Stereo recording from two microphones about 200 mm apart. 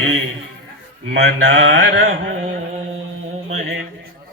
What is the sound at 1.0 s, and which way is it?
Mantra, 75° right (ahead or behind).